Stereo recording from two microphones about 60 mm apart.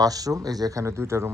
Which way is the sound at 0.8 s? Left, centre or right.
Right.